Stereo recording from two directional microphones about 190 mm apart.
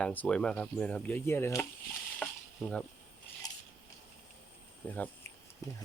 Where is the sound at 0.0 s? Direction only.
5° left (ahead or behind).